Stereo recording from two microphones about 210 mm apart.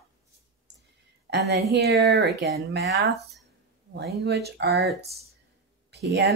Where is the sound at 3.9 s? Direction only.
50° right (ahead or behind).